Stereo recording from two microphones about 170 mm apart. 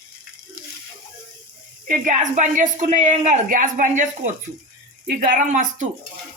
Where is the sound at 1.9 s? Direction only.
45° right (ahead or behind).